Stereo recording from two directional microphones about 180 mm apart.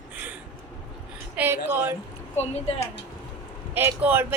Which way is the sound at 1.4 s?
10° right (ahead or behind).